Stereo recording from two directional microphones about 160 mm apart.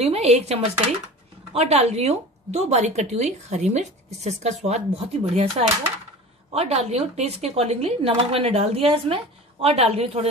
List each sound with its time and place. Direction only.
0.0 s a woman's voice: 40° right (ahead or behind)